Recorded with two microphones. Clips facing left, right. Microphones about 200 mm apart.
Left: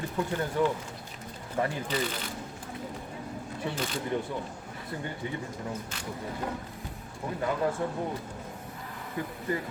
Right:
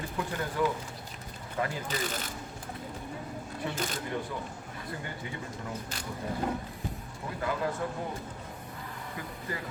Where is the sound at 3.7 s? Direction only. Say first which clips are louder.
Left 2 dB; 45° right (ahead or behind).